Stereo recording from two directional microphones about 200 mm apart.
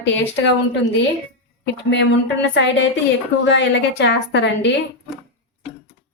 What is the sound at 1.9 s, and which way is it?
Speech, 60° left (ahead or behind).